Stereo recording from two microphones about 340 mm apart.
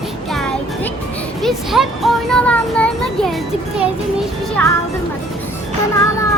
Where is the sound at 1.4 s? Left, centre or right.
Centre.